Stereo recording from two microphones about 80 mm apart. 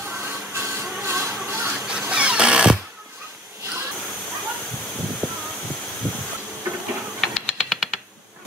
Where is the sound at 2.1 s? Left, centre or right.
Centre.